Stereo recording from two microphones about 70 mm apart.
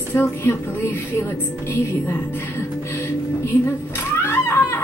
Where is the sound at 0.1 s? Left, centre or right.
Left.